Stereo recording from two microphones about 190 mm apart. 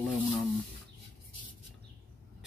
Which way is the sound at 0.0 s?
Centre (ahead or behind).